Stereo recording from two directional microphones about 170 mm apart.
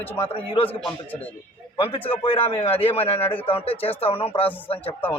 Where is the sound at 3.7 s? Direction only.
10° left (ahead or behind).